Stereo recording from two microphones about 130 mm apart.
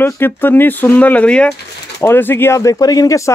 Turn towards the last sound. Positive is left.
turn(degrees=25)  # may be behind; listen again after turning